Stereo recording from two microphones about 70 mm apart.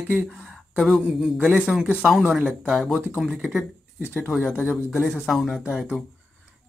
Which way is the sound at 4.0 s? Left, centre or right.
Left.